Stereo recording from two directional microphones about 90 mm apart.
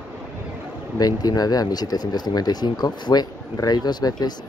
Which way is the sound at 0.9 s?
45° left (ahead or behind).